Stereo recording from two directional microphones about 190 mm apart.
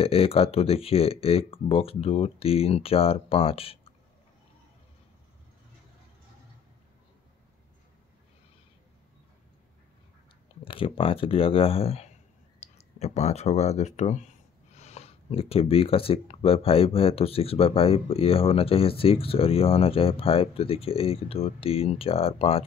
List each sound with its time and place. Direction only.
0.0 s speech: 30° left (ahead or behind)
10.6 s speech: 30° left (ahead or behind)